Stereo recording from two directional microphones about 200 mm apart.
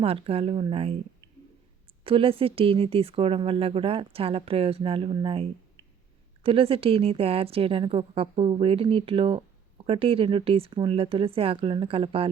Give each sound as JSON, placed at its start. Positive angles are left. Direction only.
{"t": 0.0, "sound": "a woman's voice", "side_deg": -30}
{"t": 2.0, "sound": "a woman's voice", "side_deg": -25}